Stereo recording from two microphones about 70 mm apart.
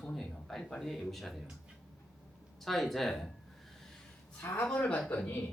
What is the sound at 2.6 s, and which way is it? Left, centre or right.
Speech, centre.